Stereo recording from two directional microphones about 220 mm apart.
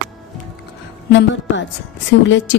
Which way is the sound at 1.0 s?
55° left (ahead or behind).